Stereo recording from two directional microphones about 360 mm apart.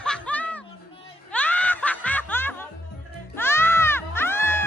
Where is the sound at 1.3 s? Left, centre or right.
Centre.